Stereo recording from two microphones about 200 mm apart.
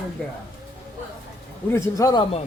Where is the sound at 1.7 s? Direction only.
15° left (ahead or behind).